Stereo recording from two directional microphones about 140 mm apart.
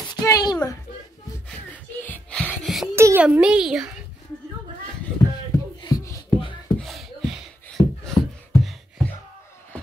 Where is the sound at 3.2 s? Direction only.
5° right (ahead or behind).